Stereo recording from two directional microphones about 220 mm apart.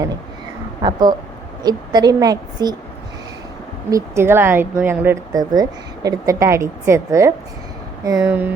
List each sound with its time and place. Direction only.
0.8 s a woman's voice: 20° right (ahead or behind)
3.9 s a woman's voice: 10° right (ahead or behind)